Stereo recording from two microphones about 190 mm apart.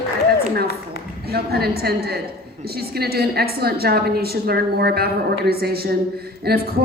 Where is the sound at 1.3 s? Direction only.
55° right (ahead or behind).